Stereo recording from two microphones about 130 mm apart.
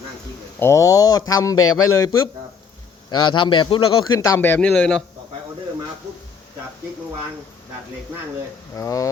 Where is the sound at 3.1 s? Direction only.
35° left (ahead or behind).